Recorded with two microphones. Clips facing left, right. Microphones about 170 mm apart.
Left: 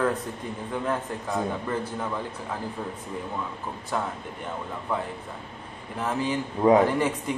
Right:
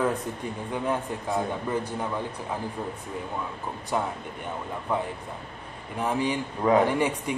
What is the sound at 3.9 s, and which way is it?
Speech, 15° right (ahead or behind).